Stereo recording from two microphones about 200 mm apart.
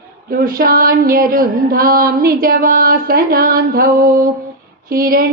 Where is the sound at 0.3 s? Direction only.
45° right (ahead or behind).